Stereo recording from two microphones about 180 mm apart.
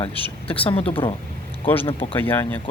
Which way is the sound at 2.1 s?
10° left (ahead or behind).